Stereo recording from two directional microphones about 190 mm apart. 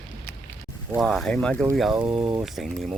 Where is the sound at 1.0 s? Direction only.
Centre (ahead or behind).